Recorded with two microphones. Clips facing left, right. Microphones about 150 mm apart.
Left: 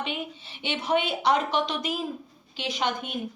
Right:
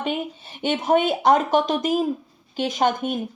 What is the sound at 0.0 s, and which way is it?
Speech, 45° right (ahead or behind).